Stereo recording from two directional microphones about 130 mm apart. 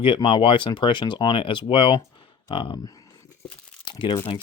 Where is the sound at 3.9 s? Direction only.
40° left (ahead or behind).